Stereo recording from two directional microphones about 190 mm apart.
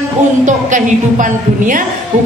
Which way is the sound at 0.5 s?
40° right (ahead or behind).